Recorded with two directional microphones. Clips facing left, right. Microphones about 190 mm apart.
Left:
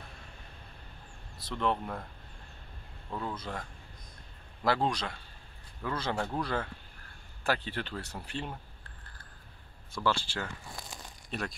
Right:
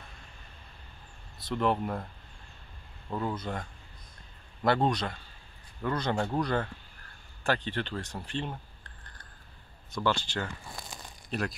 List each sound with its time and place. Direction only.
1.4 s speech: 5° right (ahead or behind)
3.2 s speech: 5° right (ahead or behind)
4.6 s speech: centre (ahead or behind)
10.0 s speech: centre (ahead or behind)